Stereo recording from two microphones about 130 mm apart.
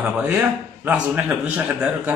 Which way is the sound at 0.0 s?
10° right (ahead or behind).